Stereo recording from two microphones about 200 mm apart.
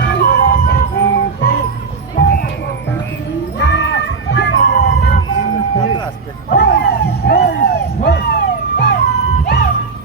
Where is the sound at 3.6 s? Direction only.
65° left (ahead or behind).